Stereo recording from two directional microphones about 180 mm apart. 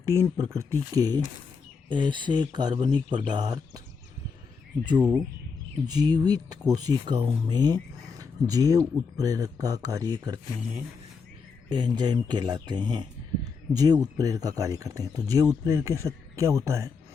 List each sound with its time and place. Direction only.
0.0 s speech: 15° right (ahead or behind)
4.9 s speech: 25° right (ahead or behind)
11.7 s speech: 25° right (ahead or behind)